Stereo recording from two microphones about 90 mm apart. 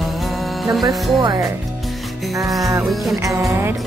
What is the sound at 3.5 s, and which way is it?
Music, 25° right (ahead or behind).